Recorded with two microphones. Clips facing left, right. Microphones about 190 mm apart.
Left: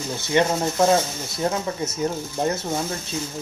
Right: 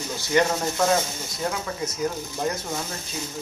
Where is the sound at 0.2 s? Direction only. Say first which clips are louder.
Left 1 dB; 25° left (ahead or behind).